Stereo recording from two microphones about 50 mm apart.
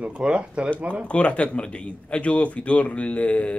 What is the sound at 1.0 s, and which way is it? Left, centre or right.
Speech, left.